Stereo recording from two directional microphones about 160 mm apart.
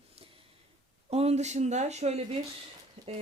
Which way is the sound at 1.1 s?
40° right (ahead or behind).